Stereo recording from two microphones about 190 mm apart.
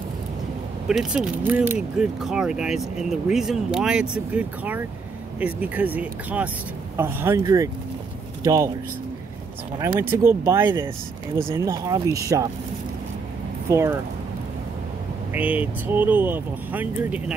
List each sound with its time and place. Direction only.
0.8 s speech: 5° right (ahead or behind)
9.8 s speech: 10° right (ahead or behind)
13.7 s speech: 15° right (ahead or behind)
15.3 s speech: 10° right (ahead or behind)